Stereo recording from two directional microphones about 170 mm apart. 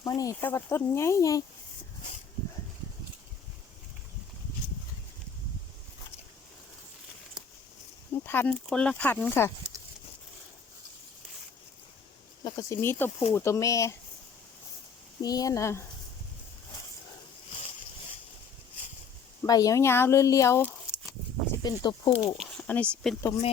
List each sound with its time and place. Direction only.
0.0 s speech: 20° left (ahead or behind)
8.1 s speech: 10° left (ahead or behind)
12.5 s speech: 20° left (ahead or behind)
15.2 s speech: 20° left (ahead or behind)
19.4 s speech: 20° left (ahead or behind)
22.4 s speech: 5° left (ahead or behind)